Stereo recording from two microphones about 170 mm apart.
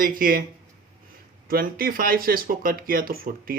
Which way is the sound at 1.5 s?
60° right (ahead or behind).